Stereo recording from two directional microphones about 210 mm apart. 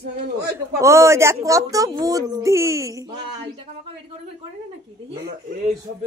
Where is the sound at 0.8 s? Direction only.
15° right (ahead or behind).